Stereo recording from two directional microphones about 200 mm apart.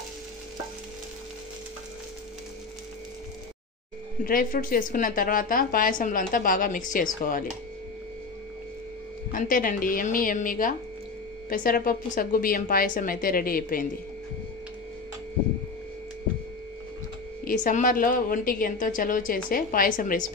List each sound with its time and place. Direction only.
4.2 s a woman's voice: 45° left (ahead or behind)
9.3 s a woman's voice: 45° left (ahead or behind)
17.5 s a woman's voice: 40° left (ahead or behind)